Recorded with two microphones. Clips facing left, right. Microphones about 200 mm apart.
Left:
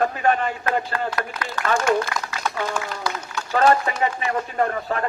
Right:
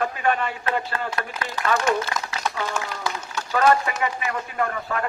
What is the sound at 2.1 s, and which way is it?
Speech, 25° right (ahead or behind).